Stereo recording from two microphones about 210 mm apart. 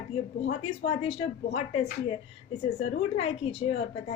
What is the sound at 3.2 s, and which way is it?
Speech, 30° left (ahead or behind).